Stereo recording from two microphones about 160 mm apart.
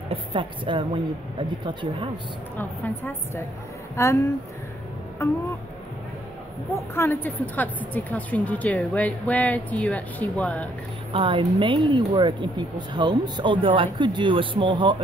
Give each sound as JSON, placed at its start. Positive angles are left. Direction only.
{"t": 0.1, "sound": "a woman's voice", "side_deg": -30}
{"t": 2.5, "sound": "a woman's voice", "side_deg": 10}
{"t": 5.2, "sound": "a woman's voice", "side_deg": 15}
{"t": 6.7, "sound": "a woman's voice", "side_deg": 15}
{"t": 11.1, "sound": "speech", "side_deg": -30}